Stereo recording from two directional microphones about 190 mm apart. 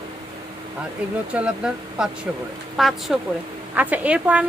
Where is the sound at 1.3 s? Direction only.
5° right (ahead or behind).